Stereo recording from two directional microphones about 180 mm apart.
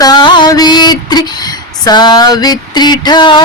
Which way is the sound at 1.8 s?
25° left (ahead or behind).